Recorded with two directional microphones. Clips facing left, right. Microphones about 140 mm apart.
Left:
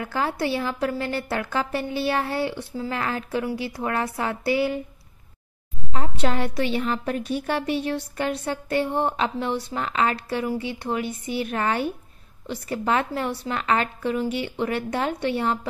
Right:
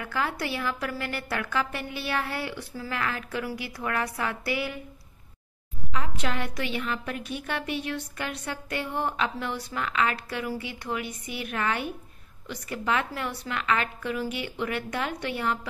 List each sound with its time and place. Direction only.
0.0 s a woman's voice: 30° left (ahead or behind)
5.9 s a woman's voice: 35° left (ahead or behind)